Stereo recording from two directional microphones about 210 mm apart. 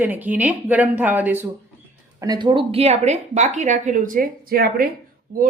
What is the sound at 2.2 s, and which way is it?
A woman's voice, 20° right (ahead or behind).